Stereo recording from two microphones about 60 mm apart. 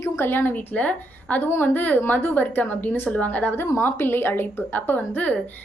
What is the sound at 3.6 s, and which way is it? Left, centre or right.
A woman's voice, left.